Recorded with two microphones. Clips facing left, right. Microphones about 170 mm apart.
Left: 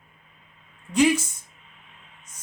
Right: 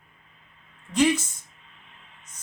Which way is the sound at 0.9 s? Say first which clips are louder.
Left 2 dB; 10° left (ahead or behind).